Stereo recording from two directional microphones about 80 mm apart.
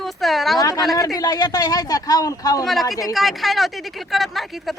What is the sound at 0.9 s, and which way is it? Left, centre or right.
A man's voice, left.